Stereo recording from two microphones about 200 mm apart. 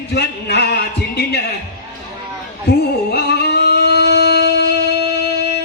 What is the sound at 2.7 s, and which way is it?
Singing, 55° left (ahead or behind).